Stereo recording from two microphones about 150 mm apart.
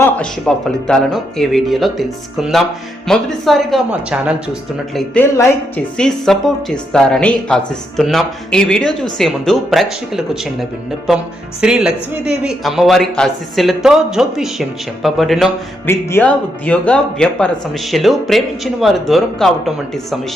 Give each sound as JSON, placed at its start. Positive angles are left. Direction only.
{"t": 0.0, "sound": "a man's voice", "side_deg": 5}
{"t": 5.2, "sound": "speech", "side_deg": 15}
{"t": 6.0, "sound": "a man's voice", "side_deg": 5}
{"t": 15.9, "sound": "a man's voice", "side_deg": 15}